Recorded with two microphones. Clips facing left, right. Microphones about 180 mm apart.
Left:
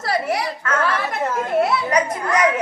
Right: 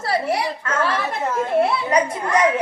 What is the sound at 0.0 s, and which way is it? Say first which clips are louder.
A child's voice: even; 30° right (ahead or behind).